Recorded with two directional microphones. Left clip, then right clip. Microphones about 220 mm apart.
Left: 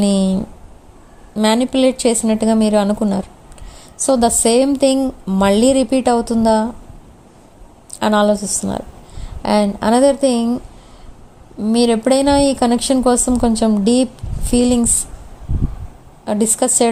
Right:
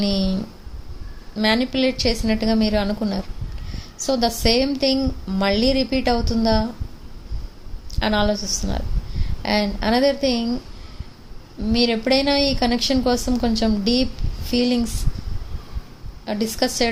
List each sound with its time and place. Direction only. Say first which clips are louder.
0.0 s a woman's voice: left 6 dB; 30° left (ahead or behind)
7.9 s a woman's voice: left 6 dB; 30° left (ahead or behind)
11.6 s a woman's voice: left 5 dB; 30° left (ahead or behind)
16.2 s a woman's voice: left 6 dB; 30° left (ahead or behind)